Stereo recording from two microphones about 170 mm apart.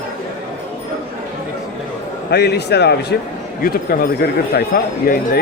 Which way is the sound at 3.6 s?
60° left (ahead or behind).